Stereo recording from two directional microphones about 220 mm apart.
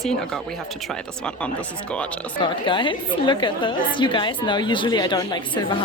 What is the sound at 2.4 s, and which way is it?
A woman's voice, 20° left (ahead or behind).